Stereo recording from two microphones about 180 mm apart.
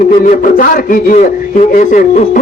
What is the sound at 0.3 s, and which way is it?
A man's voice, 50° left (ahead or behind).